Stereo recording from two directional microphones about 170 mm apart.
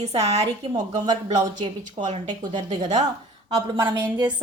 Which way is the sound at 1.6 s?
45° right (ahead or behind).